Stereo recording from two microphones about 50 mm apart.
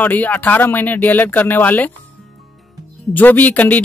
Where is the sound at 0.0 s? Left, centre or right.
Left.